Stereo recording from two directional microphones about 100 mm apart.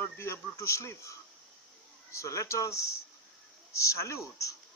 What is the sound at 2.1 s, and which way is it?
Speech, 30° left (ahead or behind).